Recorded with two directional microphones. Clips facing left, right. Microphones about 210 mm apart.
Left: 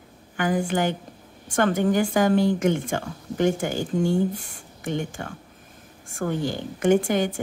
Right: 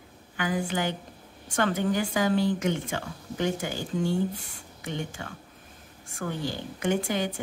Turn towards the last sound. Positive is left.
turn(degrees=50)  # may be behind; listen again after turning